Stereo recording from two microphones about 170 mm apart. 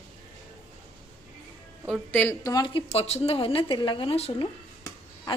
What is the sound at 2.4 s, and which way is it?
Speech, 25° left (ahead or behind).